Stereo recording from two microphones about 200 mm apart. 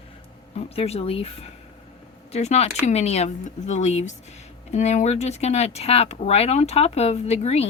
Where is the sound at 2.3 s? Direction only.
35° left (ahead or behind).